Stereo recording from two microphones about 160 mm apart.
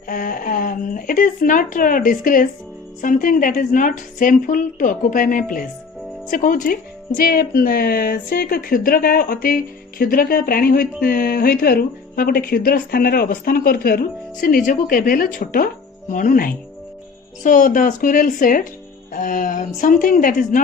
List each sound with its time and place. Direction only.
0.1 s speech: 60° left (ahead or behind)